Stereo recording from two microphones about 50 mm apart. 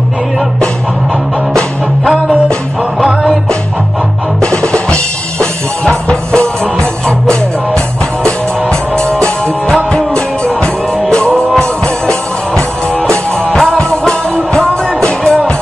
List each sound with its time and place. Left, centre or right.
3.0 s music: centre
4.4 s drum: centre
6.0 s music: centre
9.9 s music: centre